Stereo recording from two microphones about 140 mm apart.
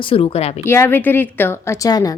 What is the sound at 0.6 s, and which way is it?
A woman's voice, 15° left (ahead or behind).